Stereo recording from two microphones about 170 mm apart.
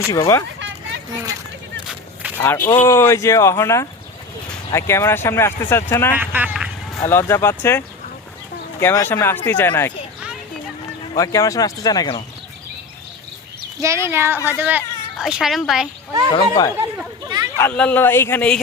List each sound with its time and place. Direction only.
0.1 s speech: 15° left (ahead or behind)
1.9 s a sound: 10° right (ahead or behind)
2.7 s speech: 15° left (ahead or behind)
6.1 s speech: 10° right (ahead or behind)
7.0 s speech: 15° left (ahead or behind)
11.1 s speech: 20° left (ahead or behind)
13.8 s a woman's voice: 15° right (ahead or behind)
16.3 s speech: 25° left (ahead or behind)
16.7 s speech: 15° right (ahead or behind)
17.6 s speech: 10° left (ahead or behind)